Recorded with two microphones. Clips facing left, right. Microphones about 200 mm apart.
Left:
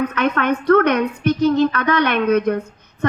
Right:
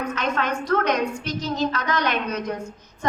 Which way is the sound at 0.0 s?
60° left (ahead or behind).